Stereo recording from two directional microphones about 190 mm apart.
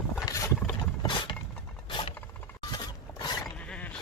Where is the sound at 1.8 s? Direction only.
25° left (ahead or behind).